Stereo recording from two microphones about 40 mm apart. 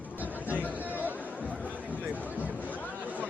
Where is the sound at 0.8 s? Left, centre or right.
Right.